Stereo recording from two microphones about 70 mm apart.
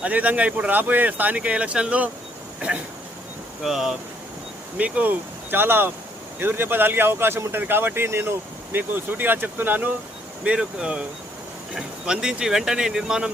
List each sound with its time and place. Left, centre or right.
0.0 s speech: right
3.6 s speech: centre
4.8 s speech: right
10.4 s speech: centre